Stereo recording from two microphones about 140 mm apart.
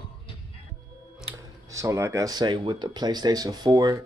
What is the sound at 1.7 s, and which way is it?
Speech, 20° right (ahead or behind).